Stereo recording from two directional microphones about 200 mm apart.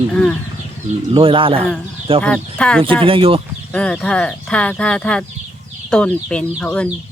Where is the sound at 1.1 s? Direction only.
25° right (ahead or behind).